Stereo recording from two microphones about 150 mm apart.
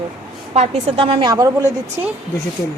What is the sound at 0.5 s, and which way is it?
Speech, 45° right (ahead or behind).